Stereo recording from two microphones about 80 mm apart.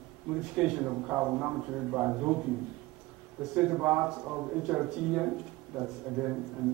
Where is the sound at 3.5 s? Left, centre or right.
Centre.